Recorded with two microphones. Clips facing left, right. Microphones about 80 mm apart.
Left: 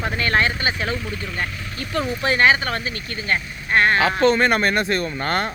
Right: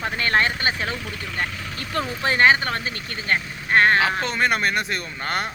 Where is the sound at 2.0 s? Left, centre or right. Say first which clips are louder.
Left 1 dB; right.